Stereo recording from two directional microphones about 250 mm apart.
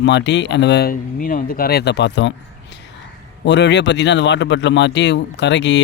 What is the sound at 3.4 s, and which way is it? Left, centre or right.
Speech, left.